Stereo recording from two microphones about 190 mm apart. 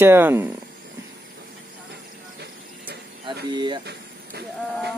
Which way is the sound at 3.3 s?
25° right (ahead or behind).